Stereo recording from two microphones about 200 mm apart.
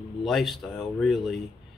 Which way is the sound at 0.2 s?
Centre (ahead or behind).